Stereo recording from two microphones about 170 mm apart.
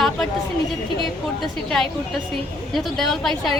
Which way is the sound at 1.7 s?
Centre (ahead or behind).